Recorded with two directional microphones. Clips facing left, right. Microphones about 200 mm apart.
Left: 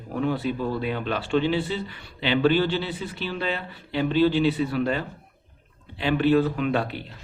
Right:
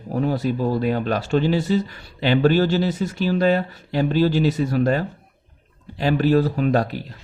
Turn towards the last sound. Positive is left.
turn(degrees=-40)  # may be behind; listen again after turning